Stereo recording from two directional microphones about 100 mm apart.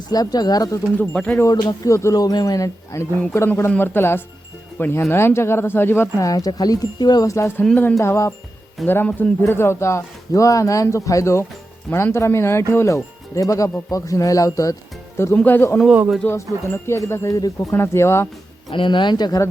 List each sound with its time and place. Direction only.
0.1 s speech: 40° left (ahead or behind)
0.9 s speech: 10° left (ahead or behind)
1.5 s speech: 40° left (ahead or behind)
8.9 s speech: 20° left (ahead or behind)
9.4 s speech: 25° left (ahead or behind)
15.4 s speech: 15° left (ahead or behind)
18.7 s speech: 55° left (ahead or behind)